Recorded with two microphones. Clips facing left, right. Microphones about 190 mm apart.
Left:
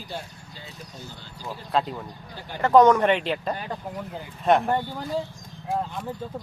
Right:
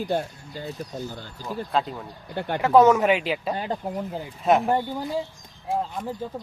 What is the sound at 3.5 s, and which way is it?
Speech, 25° right (ahead or behind).